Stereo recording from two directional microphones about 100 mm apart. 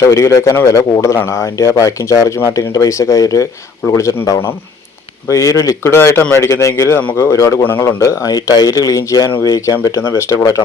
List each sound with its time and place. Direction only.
0.0 s speech: 30° left (ahead or behind)
5.9 s speech: 25° left (ahead or behind)